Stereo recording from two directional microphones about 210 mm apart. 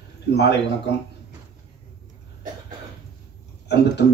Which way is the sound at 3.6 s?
55° left (ahead or behind).